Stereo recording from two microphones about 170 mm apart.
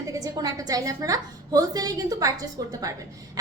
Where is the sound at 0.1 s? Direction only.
20° right (ahead or behind).